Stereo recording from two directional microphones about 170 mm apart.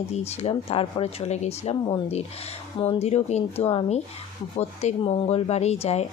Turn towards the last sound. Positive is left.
turn(degrees=40)  # may be behind; listen again after turning